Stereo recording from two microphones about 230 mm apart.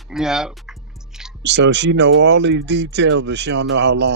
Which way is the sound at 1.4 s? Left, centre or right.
Right.